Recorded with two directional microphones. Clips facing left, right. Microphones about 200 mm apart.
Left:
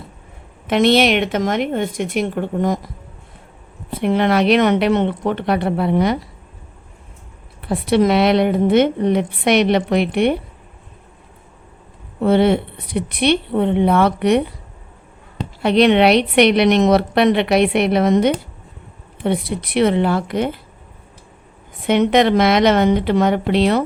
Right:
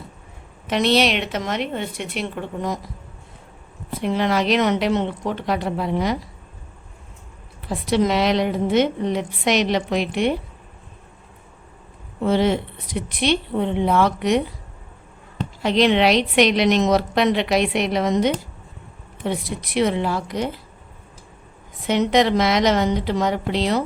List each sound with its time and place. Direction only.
0.7 s a woman's voice: 55° left (ahead or behind)
4.0 s a woman's voice: 60° left (ahead or behind)
7.6 s a woman's voice: 60° left (ahead or behind)
12.2 s a woman's voice: 60° left (ahead or behind)
15.6 s a woman's voice: 60° left (ahead or behind)
21.8 s a woman's voice: 60° left (ahead or behind)